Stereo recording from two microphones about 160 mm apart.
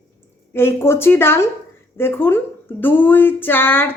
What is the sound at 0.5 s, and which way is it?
A man's voice, 15° left (ahead or behind).